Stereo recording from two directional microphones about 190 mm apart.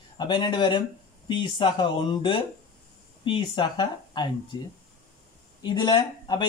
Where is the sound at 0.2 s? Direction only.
25° left (ahead or behind).